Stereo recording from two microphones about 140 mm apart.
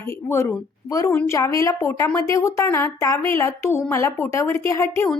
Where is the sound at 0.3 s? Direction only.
20° left (ahead or behind).